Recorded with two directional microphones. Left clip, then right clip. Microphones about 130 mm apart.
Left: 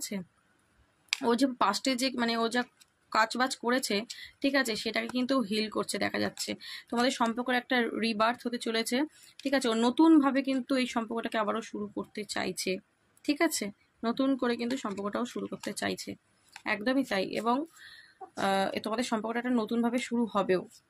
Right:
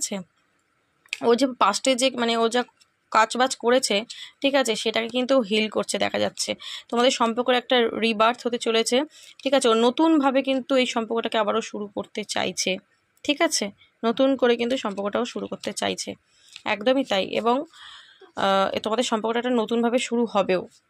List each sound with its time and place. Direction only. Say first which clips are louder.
1.2 s speech: right 8 dB; 30° right (ahead or behind)